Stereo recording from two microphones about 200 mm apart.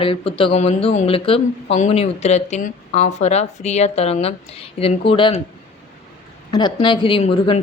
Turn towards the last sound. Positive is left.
turn(degrees=25)  # may be behind; listen again after turning